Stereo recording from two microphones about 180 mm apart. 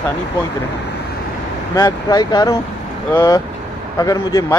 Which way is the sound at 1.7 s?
20° left (ahead or behind).